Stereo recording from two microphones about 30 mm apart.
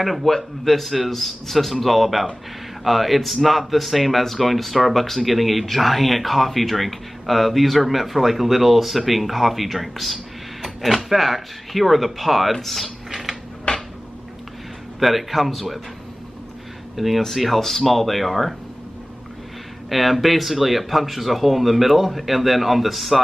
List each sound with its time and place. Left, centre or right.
0.0 s speech: centre
13.1 s a sound: centre
13.7 s a sound: left
15.0 s speech: centre
16.9 s speech: centre
19.9 s speech: centre